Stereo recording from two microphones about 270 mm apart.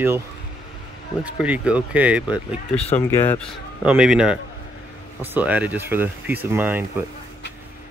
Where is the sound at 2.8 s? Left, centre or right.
Left.